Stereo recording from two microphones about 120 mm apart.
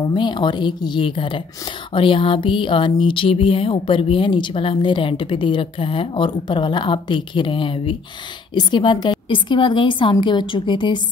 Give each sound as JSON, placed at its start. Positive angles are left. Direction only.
{"t": 0.1, "sound": "a woman's voice", "side_deg": 40}
{"t": 1.9, "sound": "a sound", "side_deg": 45}
{"t": 8.5, "sound": "a woman's voice", "side_deg": 40}